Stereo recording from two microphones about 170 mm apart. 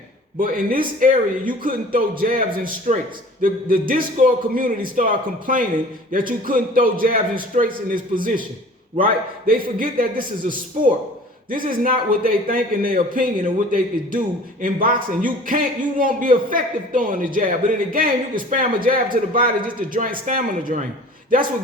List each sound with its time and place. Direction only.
0.3 s a man's voice: 55° right (ahead or behind)
11.5 s a man's voice: 55° right (ahead or behind)